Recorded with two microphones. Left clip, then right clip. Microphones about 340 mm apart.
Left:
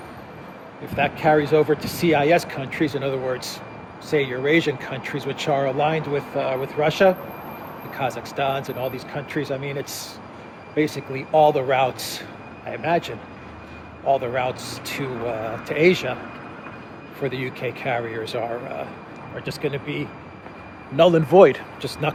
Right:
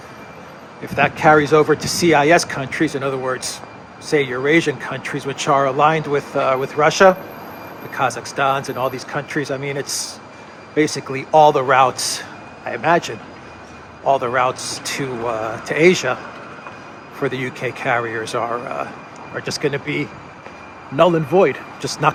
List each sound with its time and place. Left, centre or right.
0.9 s speech: centre
14.2 s speech: centre
17.2 s speech: centre